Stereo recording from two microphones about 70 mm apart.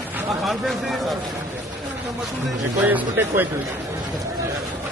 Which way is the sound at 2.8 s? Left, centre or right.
Right.